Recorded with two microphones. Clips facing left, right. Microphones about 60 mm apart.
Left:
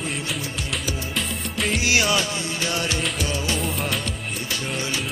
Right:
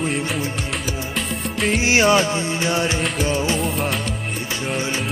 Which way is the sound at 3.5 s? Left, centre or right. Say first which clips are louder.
Right 4 dB; centre.